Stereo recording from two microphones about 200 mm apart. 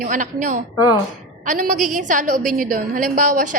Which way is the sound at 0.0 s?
40° right (ahead or behind).